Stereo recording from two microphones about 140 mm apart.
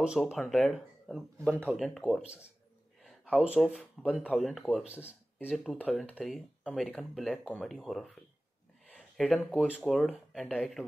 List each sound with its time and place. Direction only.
0.0 s speech: 5° right (ahead or behind)
4.8 s speech: 10° right (ahead or behind)